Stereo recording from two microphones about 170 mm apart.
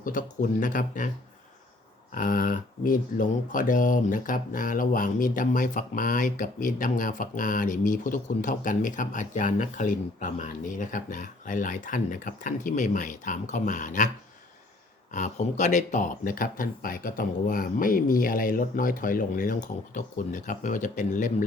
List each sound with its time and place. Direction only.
0.0 s speech: 50° left (ahead or behind)
2.1 s speech: 55° left (ahead or behind)
15.1 s speech: 45° left (ahead or behind)